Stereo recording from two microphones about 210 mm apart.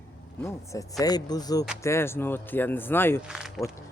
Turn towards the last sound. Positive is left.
turn(degrees=-5)  # may be behind; listen again after turning